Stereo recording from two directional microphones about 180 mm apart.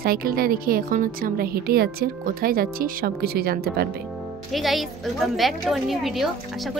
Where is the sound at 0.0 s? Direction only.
55° right (ahead or behind).